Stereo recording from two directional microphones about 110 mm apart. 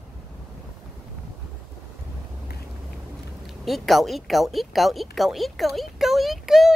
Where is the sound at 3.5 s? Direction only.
Centre (ahead or behind).